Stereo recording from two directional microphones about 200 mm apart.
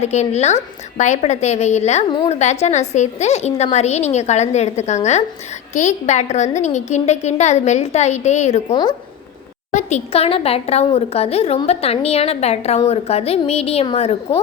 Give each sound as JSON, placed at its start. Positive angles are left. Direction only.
{"t": 0.0, "sound": "a woman's voice", "side_deg": 35}
{"t": 8.7, "sound": "a woman's voice", "side_deg": 20}
{"t": 9.7, "sound": "a woman's voice", "side_deg": 35}